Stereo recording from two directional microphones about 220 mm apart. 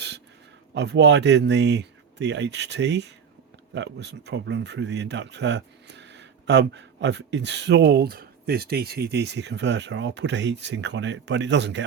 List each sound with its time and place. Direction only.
0.7 s speech: 50° right (ahead or behind)